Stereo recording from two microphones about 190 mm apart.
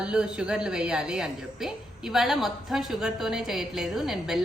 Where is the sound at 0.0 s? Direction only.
5° right (ahead or behind).